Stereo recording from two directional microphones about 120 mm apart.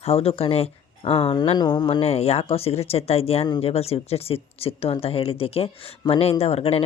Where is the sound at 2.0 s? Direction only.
60° left (ahead or behind).